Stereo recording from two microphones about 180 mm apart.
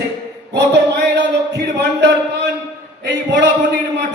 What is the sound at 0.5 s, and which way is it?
Speech, 75° right (ahead or behind).